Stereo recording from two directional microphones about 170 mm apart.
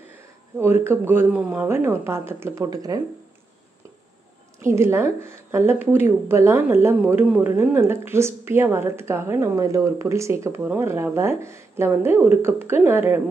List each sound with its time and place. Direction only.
0.6 s speech: 15° right (ahead or behind)
4.6 s speech: 15° right (ahead or behind)